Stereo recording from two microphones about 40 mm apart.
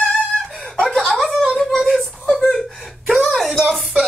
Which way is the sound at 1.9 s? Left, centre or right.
Centre.